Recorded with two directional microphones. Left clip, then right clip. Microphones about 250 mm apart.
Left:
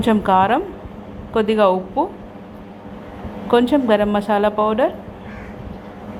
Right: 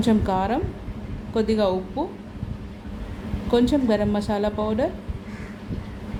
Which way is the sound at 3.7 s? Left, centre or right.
Centre.